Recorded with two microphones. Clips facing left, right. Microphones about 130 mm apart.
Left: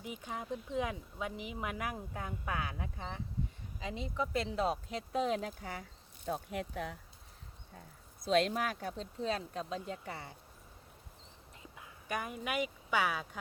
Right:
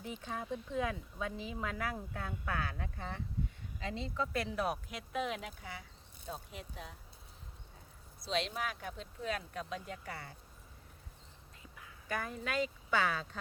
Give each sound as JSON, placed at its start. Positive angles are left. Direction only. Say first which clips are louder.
{"t": 0.0, "sound": "speech", "louder": "even", "side_deg": 15}
{"t": 6.2, "sound": "speech", "louder": "left 8 dB", "side_deg": 60}
{"t": 8.2, "sound": "speech", "louder": "left 6 dB", "side_deg": 45}
{"t": 11.6, "sound": "speech", "louder": "left 2 dB", "side_deg": 20}